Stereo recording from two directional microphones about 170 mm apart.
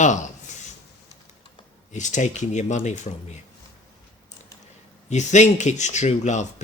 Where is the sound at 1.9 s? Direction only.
45° left (ahead or behind).